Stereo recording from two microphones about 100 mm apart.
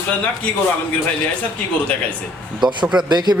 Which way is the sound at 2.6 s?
50° right (ahead or behind).